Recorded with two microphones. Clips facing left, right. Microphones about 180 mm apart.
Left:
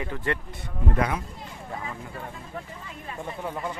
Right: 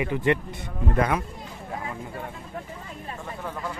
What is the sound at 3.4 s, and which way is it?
Speech, 15° left (ahead or behind).